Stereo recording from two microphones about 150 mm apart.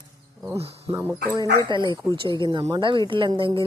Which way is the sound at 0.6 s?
40° right (ahead or behind).